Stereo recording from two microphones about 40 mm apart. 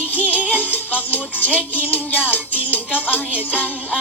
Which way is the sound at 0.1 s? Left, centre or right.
Left.